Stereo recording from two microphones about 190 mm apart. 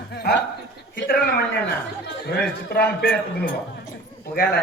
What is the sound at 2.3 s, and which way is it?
Speech, 55° left (ahead or behind).